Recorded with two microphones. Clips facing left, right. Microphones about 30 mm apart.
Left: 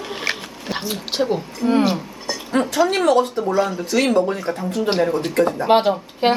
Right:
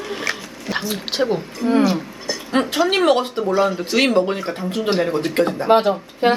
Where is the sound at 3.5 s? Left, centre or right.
Right.